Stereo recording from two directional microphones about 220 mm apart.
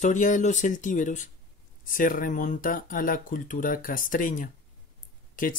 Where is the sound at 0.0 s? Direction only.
35° left (ahead or behind).